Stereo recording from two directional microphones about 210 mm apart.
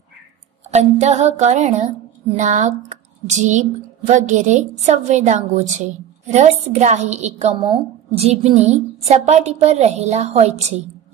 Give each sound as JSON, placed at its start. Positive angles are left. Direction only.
{"t": 0.7, "sound": "a woman's voice", "side_deg": -30}